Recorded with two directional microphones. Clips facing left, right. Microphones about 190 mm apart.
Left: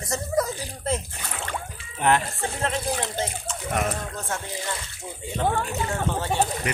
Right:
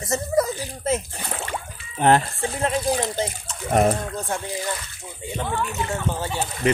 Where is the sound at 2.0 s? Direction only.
35° right (ahead or behind).